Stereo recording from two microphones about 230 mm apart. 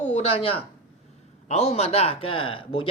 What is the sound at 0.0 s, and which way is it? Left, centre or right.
Speech, left.